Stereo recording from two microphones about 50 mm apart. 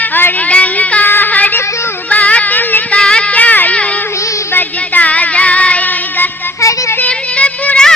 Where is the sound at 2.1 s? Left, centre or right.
Left.